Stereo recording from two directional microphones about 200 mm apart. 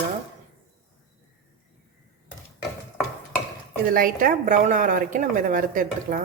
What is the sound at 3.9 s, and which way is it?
A woman's voice, 45° right (ahead or behind).